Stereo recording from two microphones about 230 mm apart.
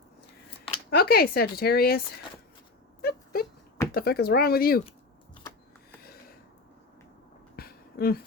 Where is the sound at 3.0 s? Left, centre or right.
Left.